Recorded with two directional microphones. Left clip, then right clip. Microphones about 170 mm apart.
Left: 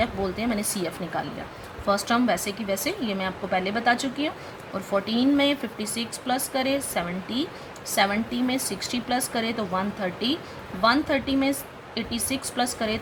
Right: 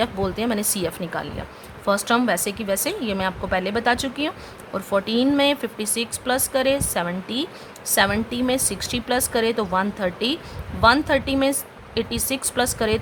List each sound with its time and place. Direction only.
0.0 s speech: 50° right (ahead or behind)